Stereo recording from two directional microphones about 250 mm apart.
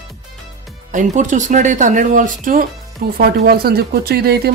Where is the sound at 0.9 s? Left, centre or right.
Right.